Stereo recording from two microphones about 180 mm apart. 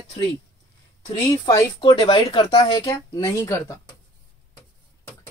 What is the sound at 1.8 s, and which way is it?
Speech, 30° left (ahead or behind).